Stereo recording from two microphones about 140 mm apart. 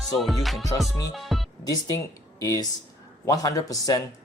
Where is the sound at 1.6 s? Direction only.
25° left (ahead or behind).